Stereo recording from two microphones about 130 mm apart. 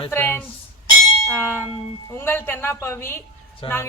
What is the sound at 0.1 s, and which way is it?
Speech, 20° left (ahead or behind).